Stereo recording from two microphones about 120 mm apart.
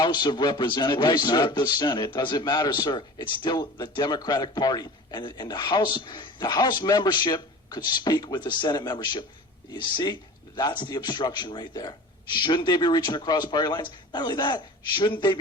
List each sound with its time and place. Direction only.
0.0 s a man's voice: 40° left (ahead or behind)